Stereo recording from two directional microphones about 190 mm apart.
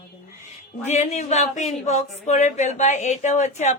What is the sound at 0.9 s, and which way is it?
Speech, 40° left (ahead or behind).